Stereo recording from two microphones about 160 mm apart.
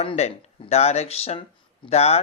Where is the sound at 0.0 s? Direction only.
35° left (ahead or behind).